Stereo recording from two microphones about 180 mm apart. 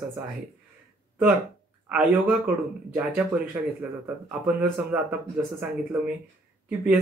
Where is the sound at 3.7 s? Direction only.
10° right (ahead or behind).